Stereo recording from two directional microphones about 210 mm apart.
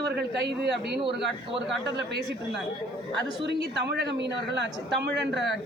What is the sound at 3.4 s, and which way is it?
A woman's voice, 55° right (ahead or behind).